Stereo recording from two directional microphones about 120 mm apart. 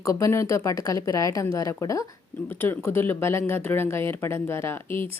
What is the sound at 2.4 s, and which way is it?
A woman's voice, 15° left (ahead or behind).